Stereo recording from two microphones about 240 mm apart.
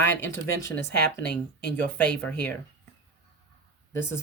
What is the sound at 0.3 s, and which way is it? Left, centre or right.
Speech, left.